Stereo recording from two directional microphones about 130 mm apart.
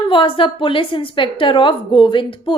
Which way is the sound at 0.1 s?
40° left (ahead or behind).